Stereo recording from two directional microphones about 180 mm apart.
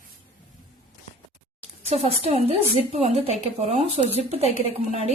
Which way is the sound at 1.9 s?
35° right (ahead or behind).